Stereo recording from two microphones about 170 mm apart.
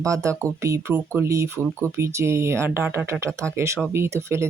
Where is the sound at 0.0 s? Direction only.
20° right (ahead or behind).